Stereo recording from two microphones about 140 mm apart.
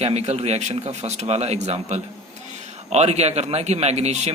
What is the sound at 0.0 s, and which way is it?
A man's voice, 50° right (ahead or behind).